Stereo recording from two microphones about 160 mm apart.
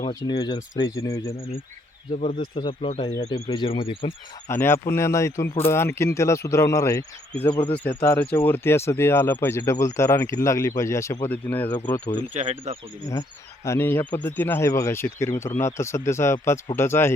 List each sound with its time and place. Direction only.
0.0 s speech: 25° left (ahead or behind)
2.1 s speech: 45° left (ahead or behind)
4.4 s speech: 15° left (ahead or behind)
7.5 s speech: 30° left (ahead or behind)
8.0 s speech: 15° left (ahead or behind)
12.3 s speech: 45° right (ahead or behind)
13.7 s speech: 15° left (ahead or behind)